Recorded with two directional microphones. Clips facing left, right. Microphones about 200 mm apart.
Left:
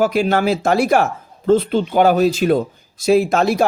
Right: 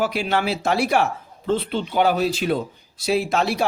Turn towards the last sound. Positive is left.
turn(degrees=45)  # may be behind; listen again after turning